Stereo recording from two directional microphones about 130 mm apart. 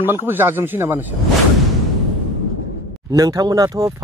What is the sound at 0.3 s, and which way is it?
Speech, 15° right (ahead or behind).